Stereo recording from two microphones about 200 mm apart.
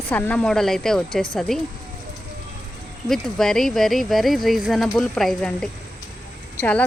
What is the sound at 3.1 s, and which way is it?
Speech, centre (ahead or behind).